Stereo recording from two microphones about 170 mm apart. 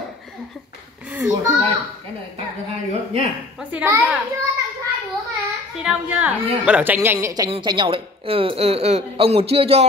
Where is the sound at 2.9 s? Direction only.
40° right (ahead or behind).